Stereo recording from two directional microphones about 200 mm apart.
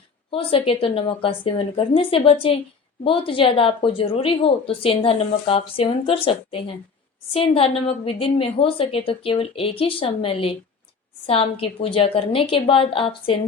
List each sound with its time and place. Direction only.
0.3 s a woman's voice: 30° left (ahead or behind)